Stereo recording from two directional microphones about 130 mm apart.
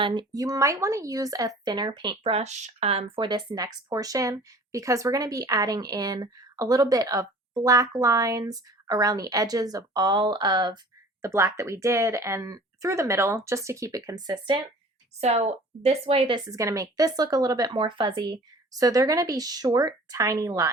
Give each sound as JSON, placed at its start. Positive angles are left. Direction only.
{"t": 0.0, "sound": "speech", "side_deg": -35}
{"t": 11.2, "sound": "speech", "side_deg": -20}
{"t": 15.2, "sound": "speech", "side_deg": -55}